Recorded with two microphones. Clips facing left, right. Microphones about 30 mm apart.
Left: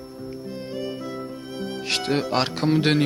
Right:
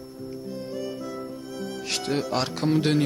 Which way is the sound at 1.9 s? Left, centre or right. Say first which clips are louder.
Left 4 dB; left.